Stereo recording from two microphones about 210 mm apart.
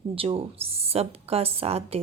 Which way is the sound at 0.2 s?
25° right (ahead or behind).